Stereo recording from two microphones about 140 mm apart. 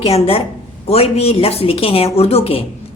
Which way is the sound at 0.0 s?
45° left (ahead or behind).